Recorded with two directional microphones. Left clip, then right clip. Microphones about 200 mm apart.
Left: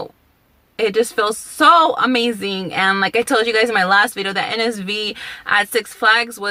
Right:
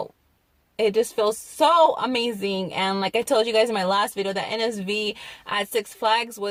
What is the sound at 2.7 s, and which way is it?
Speech, 30° left (ahead or behind).